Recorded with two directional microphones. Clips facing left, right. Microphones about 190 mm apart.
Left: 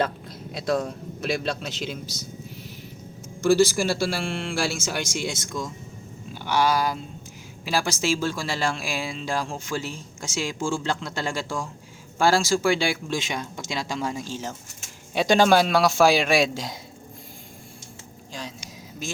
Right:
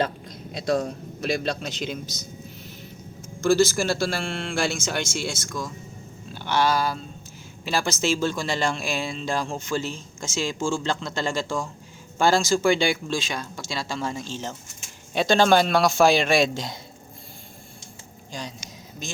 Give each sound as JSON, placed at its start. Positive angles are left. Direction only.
{"t": 0.3, "sound": "a man's voice", "side_deg": 0}
{"t": 3.4, "sound": "speech", "side_deg": 15}
{"t": 6.3, "sound": "speech", "side_deg": 10}
{"t": 13.1, "sound": "speech", "side_deg": 20}
{"t": 18.3, "sound": "a sound", "side_deg": 0}